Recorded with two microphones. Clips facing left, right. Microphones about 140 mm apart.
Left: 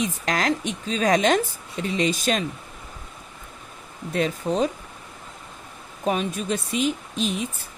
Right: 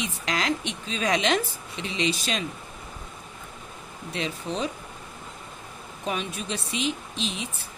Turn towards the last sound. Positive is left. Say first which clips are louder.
# left 6 dB
turn(degrees=50)  # may be behind; listen again after turning